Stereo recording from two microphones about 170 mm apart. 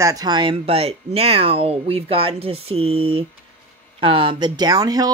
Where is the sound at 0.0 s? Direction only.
20° right (ahead or behind).